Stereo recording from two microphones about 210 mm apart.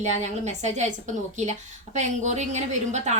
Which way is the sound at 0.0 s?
35° right (ahead or behind).